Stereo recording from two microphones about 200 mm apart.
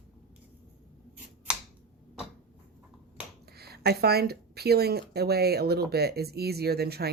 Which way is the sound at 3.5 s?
50° right (ahead or behind).